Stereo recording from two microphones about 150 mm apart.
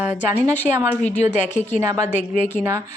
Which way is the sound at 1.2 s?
55° left (ahead or behind).